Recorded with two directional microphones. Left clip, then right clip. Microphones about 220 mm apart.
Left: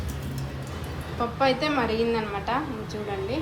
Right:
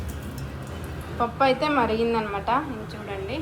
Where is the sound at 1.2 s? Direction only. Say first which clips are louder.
Right 2 dB; 10° left (ahead or behind).